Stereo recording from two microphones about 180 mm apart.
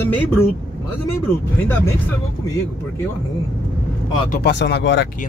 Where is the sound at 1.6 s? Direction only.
10° left (ahead or behind).